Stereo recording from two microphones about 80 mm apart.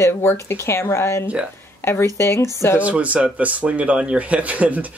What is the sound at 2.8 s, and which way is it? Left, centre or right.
Speech, centre.